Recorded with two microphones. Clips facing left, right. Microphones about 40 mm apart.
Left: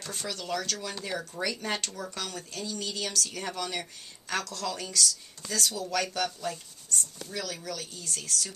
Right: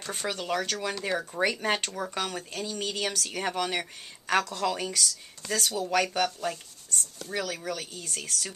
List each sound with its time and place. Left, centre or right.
0.0 s speech: right
7.2 s speech: right